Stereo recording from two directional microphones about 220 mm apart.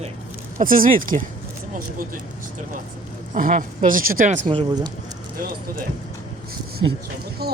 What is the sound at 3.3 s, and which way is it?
Speech, 35° right (ahead or behind).